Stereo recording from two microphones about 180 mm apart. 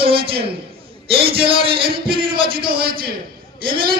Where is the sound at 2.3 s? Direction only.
55° right (ahead or behind).